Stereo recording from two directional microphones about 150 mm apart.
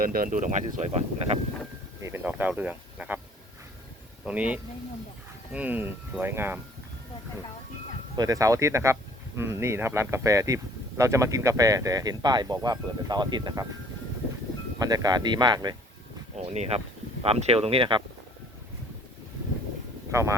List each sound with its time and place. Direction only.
0.0 s speech: 70° right (ahead or behind); by 1.4 s 50° right (ahead or behind)
2.0 s speech: 20° right (ahead or behind)
4.3 s speech: 10° right (ahead or behind)
8.1 s speech: 25° right (ahead or behind)
14.8 s speech: 25° right (ahead or behind)
16.3 s speech: 45° right (ahead or behind)
20.1 s speech: 20° right (ahead or behind)